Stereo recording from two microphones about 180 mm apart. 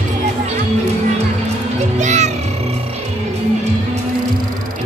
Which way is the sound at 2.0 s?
40° right (ahead or behind).